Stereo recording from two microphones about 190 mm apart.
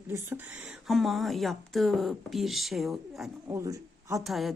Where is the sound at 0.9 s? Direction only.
Centre (ahead or behind).